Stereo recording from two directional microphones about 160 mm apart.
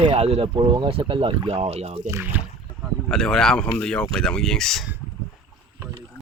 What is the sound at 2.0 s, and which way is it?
Speech, 15° right (ahead or behind).